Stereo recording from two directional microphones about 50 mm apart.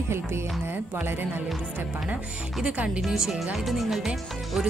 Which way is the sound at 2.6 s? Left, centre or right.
Right.